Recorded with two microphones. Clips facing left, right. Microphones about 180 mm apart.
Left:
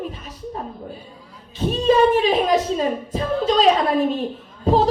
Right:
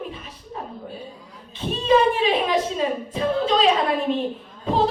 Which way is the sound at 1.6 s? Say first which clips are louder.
Left 2 dB; 40° left (ahead or behind).